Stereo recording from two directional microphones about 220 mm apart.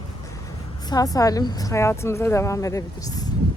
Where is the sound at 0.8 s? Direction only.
15° left (ahead or behind).